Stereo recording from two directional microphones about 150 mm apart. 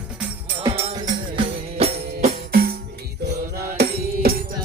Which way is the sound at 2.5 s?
90° right.